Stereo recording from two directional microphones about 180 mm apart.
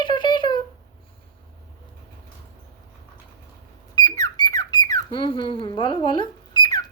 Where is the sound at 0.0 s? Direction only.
25° left (ahead or behind).